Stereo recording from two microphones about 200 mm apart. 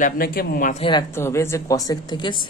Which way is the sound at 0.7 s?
25° left (ahead or behind).